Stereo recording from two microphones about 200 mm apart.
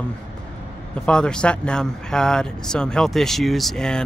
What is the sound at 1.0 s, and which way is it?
Speech, 5° left (ahead or behind).